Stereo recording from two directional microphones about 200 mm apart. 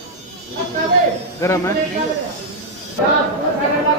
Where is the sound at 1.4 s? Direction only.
15° left (ahead or behind).